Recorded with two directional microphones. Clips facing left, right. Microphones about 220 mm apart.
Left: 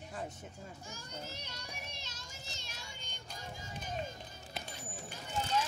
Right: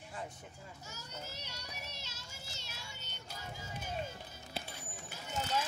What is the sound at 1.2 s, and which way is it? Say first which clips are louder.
Child singing: left 1 dB; 10° right (ahead or behind).